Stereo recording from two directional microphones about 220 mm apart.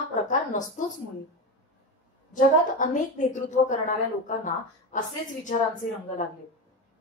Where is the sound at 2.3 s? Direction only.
35° left (ahead or behind).